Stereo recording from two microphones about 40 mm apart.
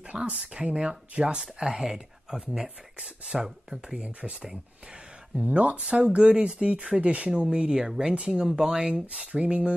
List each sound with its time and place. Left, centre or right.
0.1 s speech: right; by 4.0 s centre
4.0 s speech: right
5.4 s speech: right; by 8.1 s centre
8.1 s speech: right